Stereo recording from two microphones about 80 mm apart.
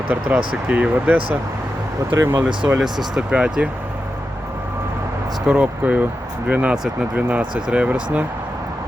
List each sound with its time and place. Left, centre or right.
0.1 s speech: right
2.0 s speech: right
3.2 s speech: centre
5.5 s speech: centre